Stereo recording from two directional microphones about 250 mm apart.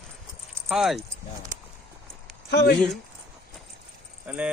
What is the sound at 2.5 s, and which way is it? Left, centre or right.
Speech, left.